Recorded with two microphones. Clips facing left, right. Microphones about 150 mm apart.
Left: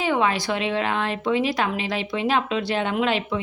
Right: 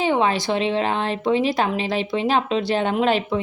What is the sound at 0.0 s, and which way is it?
A woman's voice, 30° right (ahead or behind).